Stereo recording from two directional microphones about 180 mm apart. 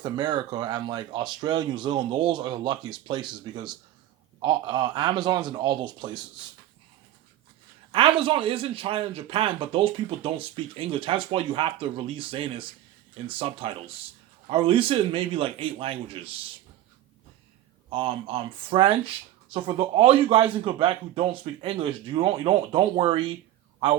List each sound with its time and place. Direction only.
0.0 s speech: 25° right (ahead or behind)
7.9 s a man's voice: 30° right (ahead or behind)
17.9 s speech: 30° right (ahead or behind)